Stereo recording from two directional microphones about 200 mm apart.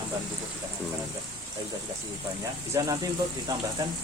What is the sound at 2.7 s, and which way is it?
Speech, 15° right (ahead or behind).